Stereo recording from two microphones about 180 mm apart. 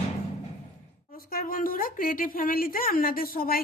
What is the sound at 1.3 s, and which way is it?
A woman's voice, 50° left (ahead or behind).